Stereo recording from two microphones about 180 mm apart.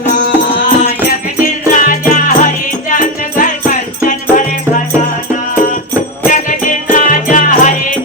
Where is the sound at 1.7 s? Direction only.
45° left (ahead or behind).